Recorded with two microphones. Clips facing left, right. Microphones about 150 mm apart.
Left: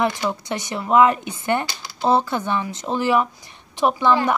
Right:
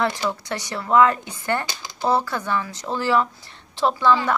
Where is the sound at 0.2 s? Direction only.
20° left (ahead or behind).